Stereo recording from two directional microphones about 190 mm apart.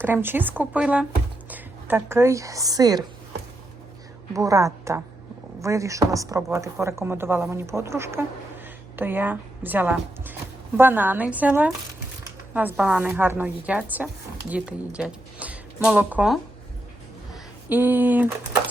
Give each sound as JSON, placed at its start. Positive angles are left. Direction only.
{"t": 0.0, "sound": "a woman's voice", "side_deg": -10}
{"t": 4.4, "sound": "a woman's voice", "side_deg": -15}
{"t": 17.3, "sound": "a sound", "side_deg": -10}